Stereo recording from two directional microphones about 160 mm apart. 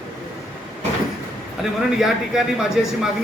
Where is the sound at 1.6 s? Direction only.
Centre (ahead or behind).